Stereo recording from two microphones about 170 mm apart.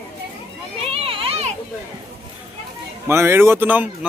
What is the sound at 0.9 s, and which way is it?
Speech, 35° right (ahead or behind).